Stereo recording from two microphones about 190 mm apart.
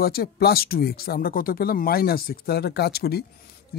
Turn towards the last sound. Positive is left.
turn(degrees=55)  # may be behind; listen again after turning